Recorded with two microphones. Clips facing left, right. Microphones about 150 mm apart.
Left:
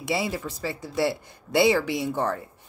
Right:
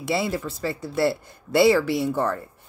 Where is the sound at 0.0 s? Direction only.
15° left (ahead or behind).